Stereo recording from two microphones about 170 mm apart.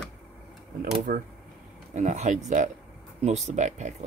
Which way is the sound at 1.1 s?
55° right (ahead or behind).